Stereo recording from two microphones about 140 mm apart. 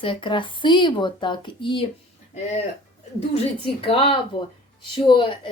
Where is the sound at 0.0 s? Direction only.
35° left (ahead or behind).